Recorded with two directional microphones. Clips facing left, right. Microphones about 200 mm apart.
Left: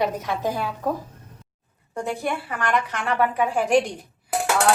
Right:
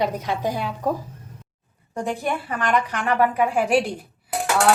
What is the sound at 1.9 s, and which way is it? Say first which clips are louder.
A woman's voice: right 1 dB; 15° right (ahead or behind).